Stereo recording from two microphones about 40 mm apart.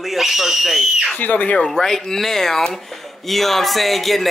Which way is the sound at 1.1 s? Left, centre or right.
Left.